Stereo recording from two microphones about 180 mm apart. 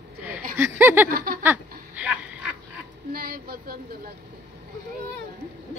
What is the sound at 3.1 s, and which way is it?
Speech, 55° right (ahead or behind).